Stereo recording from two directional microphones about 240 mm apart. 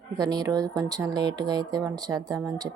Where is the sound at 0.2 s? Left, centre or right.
Centre.